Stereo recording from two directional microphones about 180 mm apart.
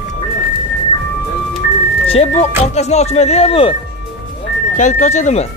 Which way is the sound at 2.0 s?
35° left (ahead or behind).